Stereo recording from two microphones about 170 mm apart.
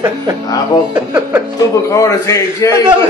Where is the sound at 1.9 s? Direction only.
20° left (ahead or behind).